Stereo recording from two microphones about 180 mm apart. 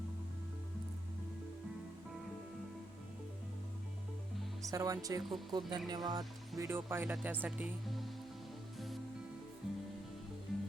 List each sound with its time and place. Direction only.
4.6 s speech: 20° right (ahead or behind); by 8.1 s centre (ahead or behind)
9.6 s music: 5° right (ahead or behind)